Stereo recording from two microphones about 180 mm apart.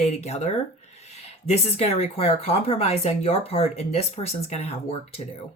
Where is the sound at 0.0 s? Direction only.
35° left (ahead or behind).